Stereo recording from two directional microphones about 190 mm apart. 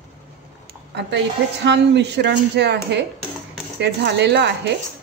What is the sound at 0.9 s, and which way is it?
Speech, 65° right (ahead or behind).